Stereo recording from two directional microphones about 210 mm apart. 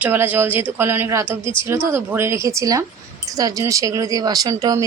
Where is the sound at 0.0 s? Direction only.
10° right (ahead or behind).